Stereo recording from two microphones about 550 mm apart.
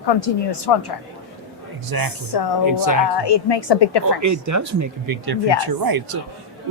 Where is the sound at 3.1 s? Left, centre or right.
Left.